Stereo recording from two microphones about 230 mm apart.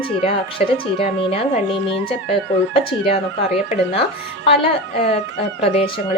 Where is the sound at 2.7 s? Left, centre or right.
Left.